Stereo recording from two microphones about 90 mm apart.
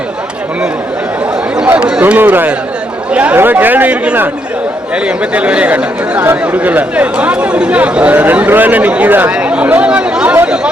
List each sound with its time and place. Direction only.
1.6 s a man's voice: 15° right (ahead or behind)